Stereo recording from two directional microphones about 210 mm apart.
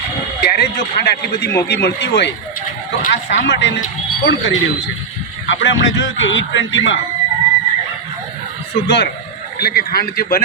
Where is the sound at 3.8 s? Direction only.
50° left (ahead or behind).